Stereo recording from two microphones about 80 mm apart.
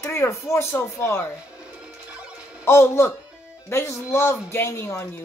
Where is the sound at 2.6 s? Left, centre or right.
Left.